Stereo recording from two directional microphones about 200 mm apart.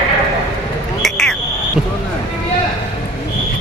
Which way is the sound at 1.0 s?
5° left (ahead or behind).